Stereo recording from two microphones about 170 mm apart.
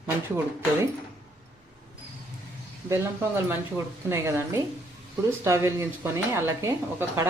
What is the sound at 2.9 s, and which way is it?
Speech, 15° right (ahead or behind).